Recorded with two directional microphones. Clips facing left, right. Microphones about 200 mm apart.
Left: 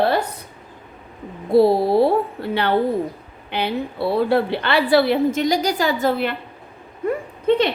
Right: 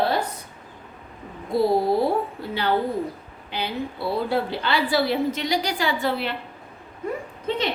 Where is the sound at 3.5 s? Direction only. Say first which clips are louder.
Left 5 dB; 60° left (ahead or behind); by 6.3 s 45° left (ahead or behind).